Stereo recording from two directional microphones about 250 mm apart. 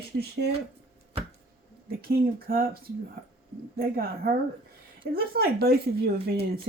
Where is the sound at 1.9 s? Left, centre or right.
Right.